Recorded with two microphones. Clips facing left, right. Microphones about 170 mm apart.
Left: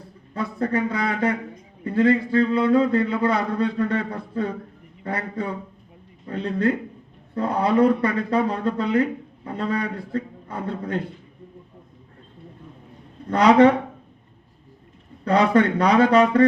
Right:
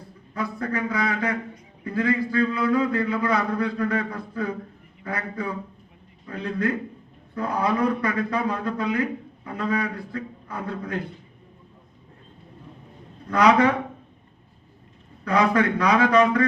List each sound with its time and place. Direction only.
0.3 s a man's voice: 30° left (ahead or behind)
13.2 s a man's voice: 30° left (ahead or behind)
15.2 s a man's voice: 30° left (ahead or behind)